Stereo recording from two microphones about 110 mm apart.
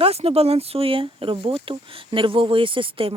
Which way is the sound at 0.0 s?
65° right (ahead or behind).